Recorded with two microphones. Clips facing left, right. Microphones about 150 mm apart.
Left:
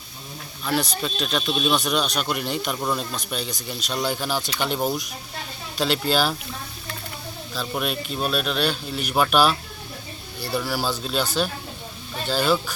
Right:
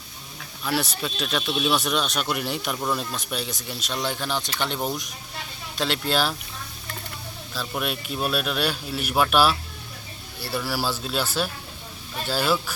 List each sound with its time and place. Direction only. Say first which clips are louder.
0.6 s speech: left 2 dB; 5° right (ahead or behind)
7.5 s speech: left 2 dB; centre (ahead or behind)